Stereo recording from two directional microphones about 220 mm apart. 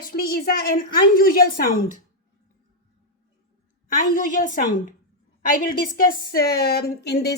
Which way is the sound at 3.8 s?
40° left (ahead or behind).